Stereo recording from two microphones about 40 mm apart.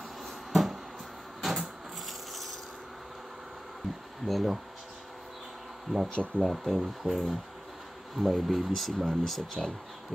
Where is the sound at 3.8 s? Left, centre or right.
Centre.